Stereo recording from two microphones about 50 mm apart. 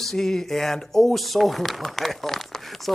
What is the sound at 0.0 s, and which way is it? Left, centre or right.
Speech, centre.